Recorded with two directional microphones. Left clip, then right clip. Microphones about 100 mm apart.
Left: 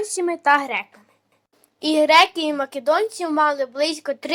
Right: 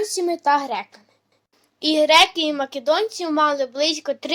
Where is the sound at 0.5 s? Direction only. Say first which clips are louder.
Left 3 dB; 45° left (ahead or behind).